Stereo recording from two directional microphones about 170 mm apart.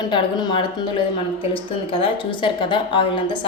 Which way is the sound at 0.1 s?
30° left (ahead or behind).